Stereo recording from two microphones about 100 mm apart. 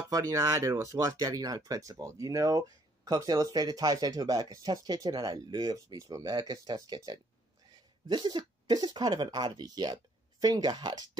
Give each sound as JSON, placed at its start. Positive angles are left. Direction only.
{"t": 0.1, "sound": "speech", "side_deg": -35}
{"t": 8.1, "sound": "speech", "side_deg": -45}